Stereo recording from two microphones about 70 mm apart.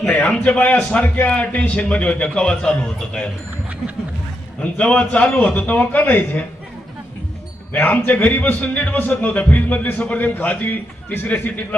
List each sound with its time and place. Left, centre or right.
0.1 s a man's voice: left
4.6 s a man's voice: centre
7.7 s a man's voice: left